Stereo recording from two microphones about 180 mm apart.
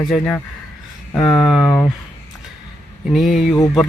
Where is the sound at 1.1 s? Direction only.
Centre (ahead or behind).